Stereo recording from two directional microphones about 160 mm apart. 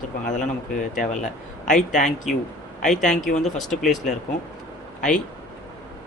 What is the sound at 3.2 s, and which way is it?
Speech, 50° left (ahead or behind).